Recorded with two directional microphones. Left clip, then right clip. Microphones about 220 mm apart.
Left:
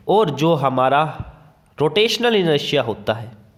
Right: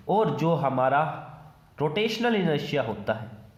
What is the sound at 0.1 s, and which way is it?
A man's voice, 45° left (ahead or behind).